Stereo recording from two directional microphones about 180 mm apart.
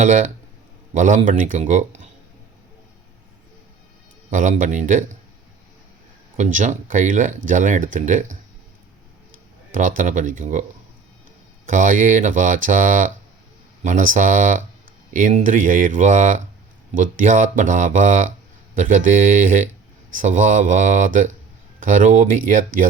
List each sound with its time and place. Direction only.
0.0 s speech: 45° right (ahead or behind)
4.3 s speech: 45° right (ahead or behind)
6.3 s speech: 45° right (ahead or behind)
9.7 s speech: 45° right (ahead or behind)